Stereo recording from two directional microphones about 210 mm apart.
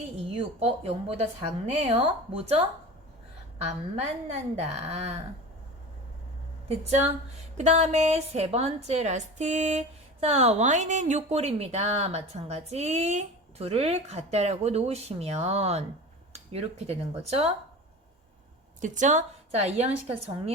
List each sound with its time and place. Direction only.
0.3 s a woman's voice: 30° right (ahead or behind)
3.7 s a woman's voice: 30° right (ahead or behind)
6.7 s a woman's voice: 30° right (ahead or behind)
18.8 s a woman's voice: 35° right (ahead or behind)